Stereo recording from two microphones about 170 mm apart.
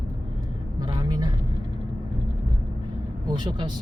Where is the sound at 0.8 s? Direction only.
25° right (ahead or behind).